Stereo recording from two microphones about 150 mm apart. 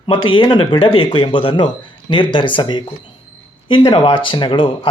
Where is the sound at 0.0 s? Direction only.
35° left (ahead or behind).